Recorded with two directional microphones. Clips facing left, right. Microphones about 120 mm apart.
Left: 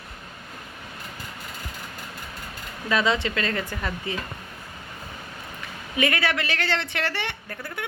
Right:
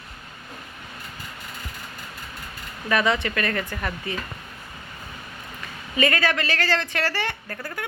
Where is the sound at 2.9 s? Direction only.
15° left (ahead or behind).